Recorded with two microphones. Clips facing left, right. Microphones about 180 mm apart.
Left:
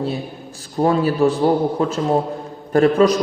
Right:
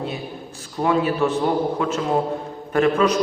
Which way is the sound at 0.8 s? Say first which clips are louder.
Left 3 dB; 35° left (ahead or behind).